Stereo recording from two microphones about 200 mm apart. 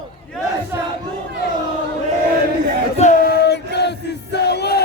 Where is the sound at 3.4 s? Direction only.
55° left (ahead or behind).